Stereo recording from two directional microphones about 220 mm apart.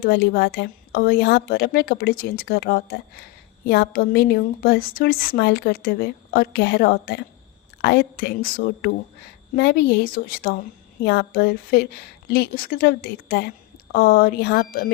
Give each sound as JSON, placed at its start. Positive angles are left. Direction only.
{"t": 0.0, "sound": "a woman's voice", "side_deg": 45}